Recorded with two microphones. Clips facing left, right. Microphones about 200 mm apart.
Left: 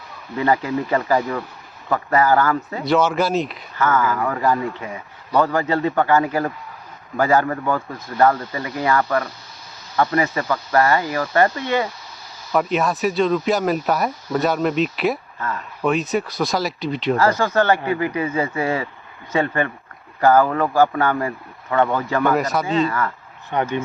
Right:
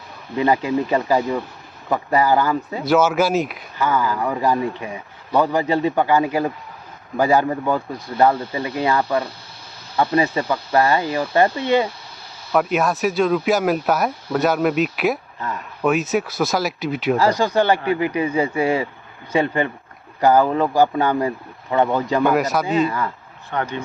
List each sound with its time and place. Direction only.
0.3 s speech: 15° right (ahead or behind)
2.8 s speech: 5° right (ahead or behind)
3.8 s speech: 15° right (ahead or behind)
12.5 s speech: 5° right (ahead or behind)
15.4 s speech: 15° right (ahead or behind)
15.8 s speech: 5° right (ahead or behind)
22.4 s speech: centre (ahead or behind)
22.6 s speech: 15° right (ahead or behind)
23.5 s speech: 15° left (ahead or behind)